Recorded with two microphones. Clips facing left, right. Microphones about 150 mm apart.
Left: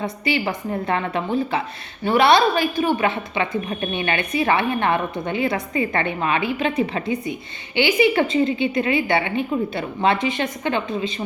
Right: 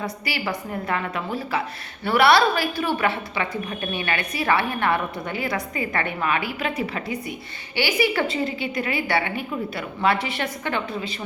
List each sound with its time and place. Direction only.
0.0 s a woman's voice: 25° left (ahead or behind)